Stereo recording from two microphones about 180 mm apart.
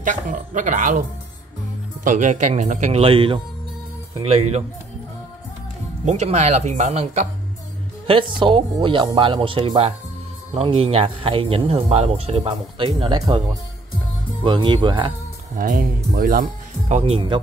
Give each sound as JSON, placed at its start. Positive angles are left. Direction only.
{"t": 0.0, "sound": "speech", "side_deg": -45}
{"t": 2.0, "sound": "speech", "side_deg": -45}
{"t": 6.0, "sound": "speech", "side_deg": -40}
{"t": 8.1, "sound": "speech", "side_deg": -30}
{"t": 14.4, "sound": "speech", "side_deg": -25}
{"t": 15.5, "sound": "speech", "side_deg": -50}
{"t": 16.9, "sound": "speech", "side_deg": -35}